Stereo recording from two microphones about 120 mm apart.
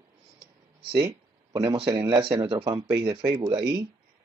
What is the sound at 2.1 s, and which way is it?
Speech, 40° right (ahead or behind).